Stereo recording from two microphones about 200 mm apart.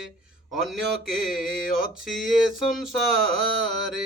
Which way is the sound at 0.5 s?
Centre (ahead or behind).